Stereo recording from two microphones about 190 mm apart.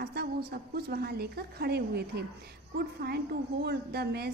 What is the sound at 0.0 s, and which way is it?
A woman's voice, 55° right (ahead or behind).